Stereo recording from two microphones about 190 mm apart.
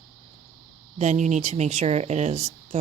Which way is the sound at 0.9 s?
35° right (ahead or behind).